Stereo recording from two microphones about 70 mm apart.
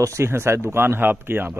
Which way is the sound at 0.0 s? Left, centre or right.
Right.